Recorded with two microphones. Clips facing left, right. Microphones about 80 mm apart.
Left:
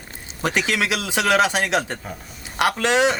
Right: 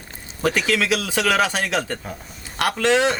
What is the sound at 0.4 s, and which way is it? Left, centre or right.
A man's voice, left.